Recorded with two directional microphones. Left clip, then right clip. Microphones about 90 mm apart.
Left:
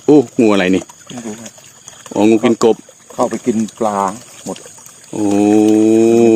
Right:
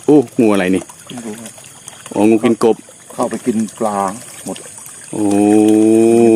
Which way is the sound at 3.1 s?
45° left (ahead or behind).